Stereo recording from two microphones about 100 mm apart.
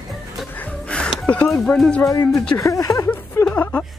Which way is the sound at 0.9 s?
10° left (ahead or behind).